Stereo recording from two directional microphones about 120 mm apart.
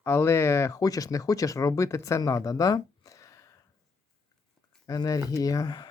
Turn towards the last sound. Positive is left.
turn(degrees=35)  # may be behind; listen again after turning